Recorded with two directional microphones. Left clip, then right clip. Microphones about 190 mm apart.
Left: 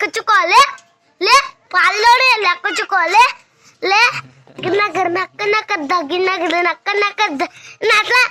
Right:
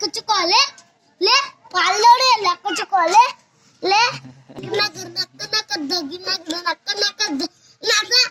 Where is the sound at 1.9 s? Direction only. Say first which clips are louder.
Left 1 dB; 5° left (ahead or behind).